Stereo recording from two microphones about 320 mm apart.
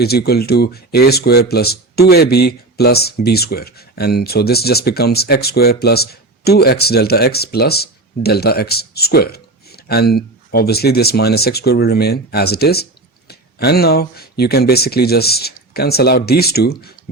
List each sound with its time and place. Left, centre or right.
0.0 s speech: left